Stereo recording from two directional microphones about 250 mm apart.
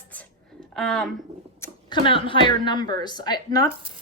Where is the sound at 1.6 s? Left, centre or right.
Centre.